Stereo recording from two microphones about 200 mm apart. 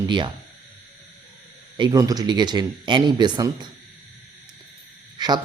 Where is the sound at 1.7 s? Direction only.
20° right (ahead or behind).